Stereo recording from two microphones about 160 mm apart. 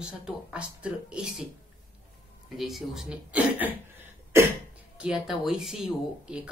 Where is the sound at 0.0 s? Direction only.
5° right (ahead or behind).